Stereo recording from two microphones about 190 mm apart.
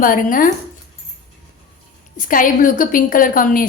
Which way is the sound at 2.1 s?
45° left (ahead or behind).